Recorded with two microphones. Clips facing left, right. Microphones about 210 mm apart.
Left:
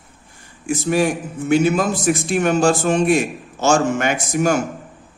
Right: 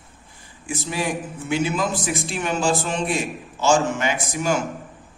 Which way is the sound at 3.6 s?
45° left (ahead or behind).